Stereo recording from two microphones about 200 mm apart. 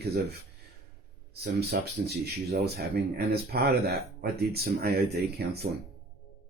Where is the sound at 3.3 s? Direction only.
55° right (ahead or behind).